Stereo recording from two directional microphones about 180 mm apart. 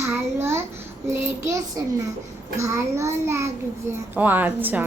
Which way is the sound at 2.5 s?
15° right (ahead or behind).